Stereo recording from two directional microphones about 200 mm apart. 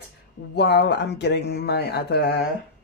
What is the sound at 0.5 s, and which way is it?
Speech, 60° left (ahead or behind).